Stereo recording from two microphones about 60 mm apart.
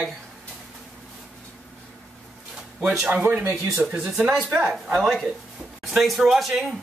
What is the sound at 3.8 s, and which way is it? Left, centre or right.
Speech, centre.